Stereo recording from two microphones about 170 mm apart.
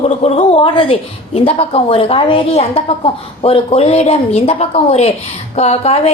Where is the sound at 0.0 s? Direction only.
35° left (ahead or behind).